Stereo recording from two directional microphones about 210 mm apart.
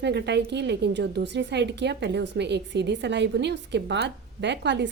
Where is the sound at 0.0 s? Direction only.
55° right (ahead or behind).